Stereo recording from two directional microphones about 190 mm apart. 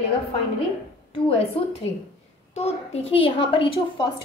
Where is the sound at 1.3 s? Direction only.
30° left (ahead or behind).